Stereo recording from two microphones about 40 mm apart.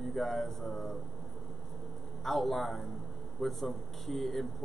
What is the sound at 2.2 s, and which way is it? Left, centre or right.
A man's voice, centre.